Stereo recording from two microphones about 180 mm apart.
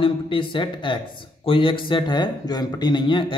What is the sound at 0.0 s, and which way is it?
Speech, 30° left (ahead or behind).